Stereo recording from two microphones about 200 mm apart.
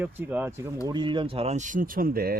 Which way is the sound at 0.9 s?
25° right (ahead or behind).